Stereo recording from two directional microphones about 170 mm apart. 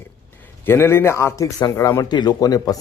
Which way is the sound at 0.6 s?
15° left (ahead or behind).